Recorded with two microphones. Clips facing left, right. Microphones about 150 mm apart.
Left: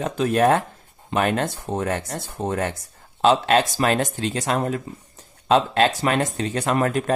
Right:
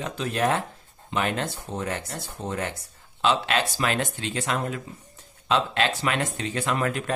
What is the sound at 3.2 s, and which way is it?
Speech, 40° left (ahead or behind).